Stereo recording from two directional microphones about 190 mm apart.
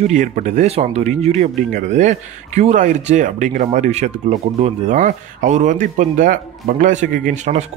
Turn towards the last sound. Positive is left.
turn(degrees=-45)  # may be behind; listen again after turning